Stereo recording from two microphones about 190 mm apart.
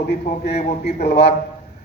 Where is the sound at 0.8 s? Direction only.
60° left (ahead or behind).